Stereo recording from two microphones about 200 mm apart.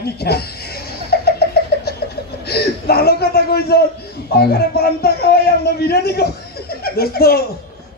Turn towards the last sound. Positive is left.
turn(degrees=50)  # may be behind; listen again after turning